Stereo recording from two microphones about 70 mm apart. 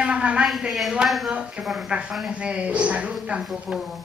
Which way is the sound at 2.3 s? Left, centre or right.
Centre.